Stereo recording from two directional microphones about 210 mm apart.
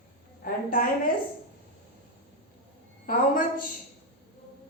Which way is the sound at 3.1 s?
40° left (ahead or behind).